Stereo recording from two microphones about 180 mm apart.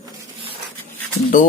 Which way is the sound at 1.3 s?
45° left (ahead or behind).